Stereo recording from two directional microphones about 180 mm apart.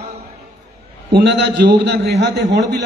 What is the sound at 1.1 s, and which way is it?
A man's voice, 70° right (ahead or behind).